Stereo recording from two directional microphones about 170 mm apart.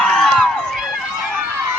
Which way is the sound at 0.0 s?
Centre (ahead or behind).